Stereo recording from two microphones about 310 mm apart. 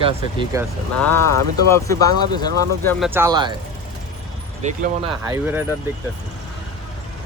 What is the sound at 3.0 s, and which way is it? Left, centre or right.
Speech, centre.